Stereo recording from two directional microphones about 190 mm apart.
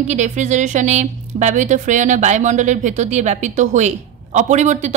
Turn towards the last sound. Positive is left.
turn(degrees=-40)  # may be behind; listen again after turning